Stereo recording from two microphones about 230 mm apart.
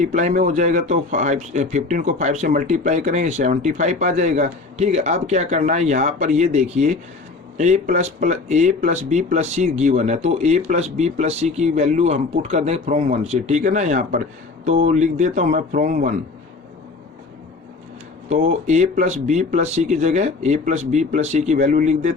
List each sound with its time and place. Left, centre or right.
0.0 s speech: right
18.3 s speech: right